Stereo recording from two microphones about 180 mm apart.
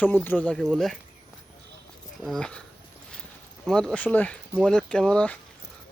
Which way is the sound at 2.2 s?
5° left (ahead or behind).